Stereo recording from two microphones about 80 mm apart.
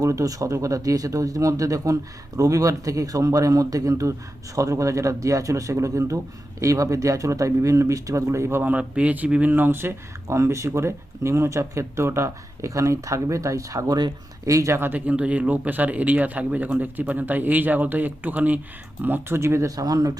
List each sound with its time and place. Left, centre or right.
0.0 s speech: right
8.6 s speech: centre; by 14.8 s right
14.8 s speech: right
19.7 s speech: right